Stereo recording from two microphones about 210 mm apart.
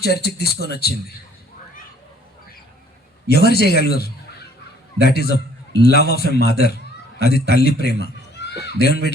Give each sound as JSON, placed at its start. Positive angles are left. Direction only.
{"t": 0.0, "sound": "a man's voice", "side_deg": 50}
{"t": 3.2, "sound": "a man's voice", "side_deg": 50}